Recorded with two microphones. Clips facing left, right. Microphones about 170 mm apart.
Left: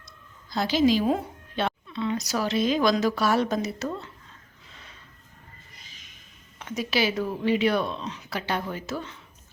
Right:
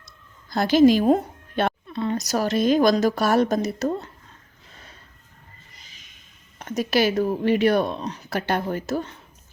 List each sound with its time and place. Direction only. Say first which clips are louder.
0.5 s speech: right 6 dB; 50° right (ahead or behind)
4.7 s a sound: right 2 dB; 40° right (ahead or behind)
6.6 s speech: right 5 dB; 45° right (ahead or behind)